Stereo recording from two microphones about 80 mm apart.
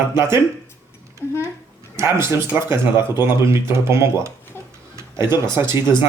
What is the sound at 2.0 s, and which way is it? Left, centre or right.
Speech, right.